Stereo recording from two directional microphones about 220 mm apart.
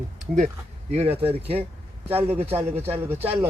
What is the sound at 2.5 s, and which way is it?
Speech, 10° right (ahead or behind).